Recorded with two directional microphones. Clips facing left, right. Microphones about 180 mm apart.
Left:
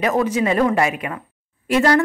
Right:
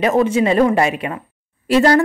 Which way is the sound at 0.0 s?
25° right (ahead or behind).